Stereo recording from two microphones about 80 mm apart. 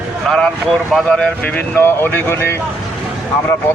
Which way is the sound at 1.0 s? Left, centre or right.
Centre.